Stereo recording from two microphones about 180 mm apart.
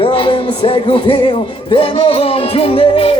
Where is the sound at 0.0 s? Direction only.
30° left (ahead or behind).